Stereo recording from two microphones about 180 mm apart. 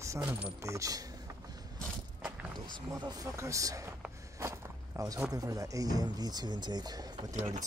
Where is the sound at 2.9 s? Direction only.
20° right (ahead or behind).